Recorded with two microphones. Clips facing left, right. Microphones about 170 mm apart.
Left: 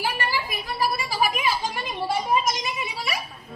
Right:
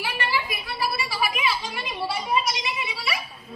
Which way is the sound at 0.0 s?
45° left (ahead or behind).